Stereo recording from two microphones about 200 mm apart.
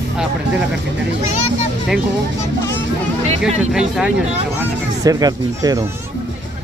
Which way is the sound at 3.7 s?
5° right (ahead or behind).